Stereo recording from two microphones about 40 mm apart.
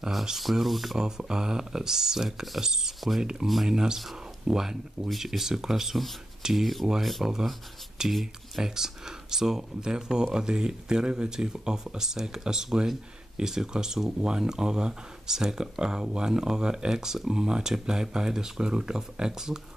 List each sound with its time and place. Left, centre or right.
0.4 s speech: centre
0.9 s speech: centre
8.6 s speech: centre